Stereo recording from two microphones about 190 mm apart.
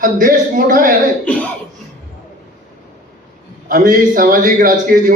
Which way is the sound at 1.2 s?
10° left (ahead or behind).